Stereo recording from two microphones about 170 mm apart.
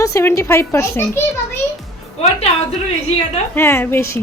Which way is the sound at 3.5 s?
15° left (ahead or behind).